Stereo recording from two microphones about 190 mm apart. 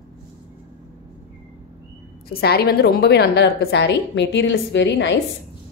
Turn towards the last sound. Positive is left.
turn(degrees=65)  # may be behind; listen again after turning